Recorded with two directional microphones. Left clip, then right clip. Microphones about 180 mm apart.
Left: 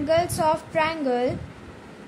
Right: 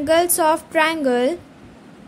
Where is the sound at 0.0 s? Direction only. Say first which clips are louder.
Right 5 dB; 60° right (ahead or behind).